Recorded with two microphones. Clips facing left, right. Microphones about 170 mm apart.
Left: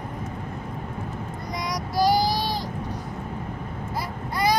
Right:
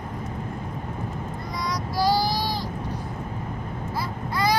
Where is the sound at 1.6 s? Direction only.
20° left (ahead or behind).